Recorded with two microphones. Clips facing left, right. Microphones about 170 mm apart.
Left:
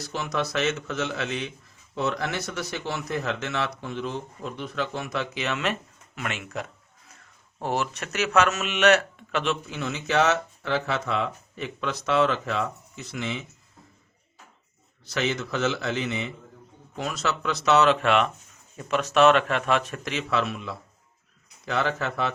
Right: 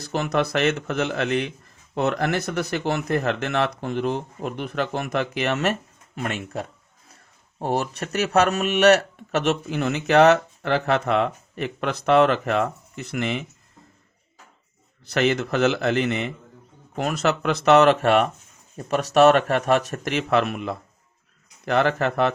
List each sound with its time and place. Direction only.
0.1 s speech: 60° right (ahead or behind)
6.1 s speech: 35° right (ahead or behind); by 13.4 s 60° right (ahead or behind)
15.1 s speech: 60° right (ahead or behind); by 20.0 s 40° right (ahead or behind)
20.1 s speech: 55° right (ahead or behind)